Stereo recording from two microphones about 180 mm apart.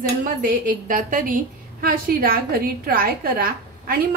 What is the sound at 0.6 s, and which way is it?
A woman's voice, 50° right (ahead or behind).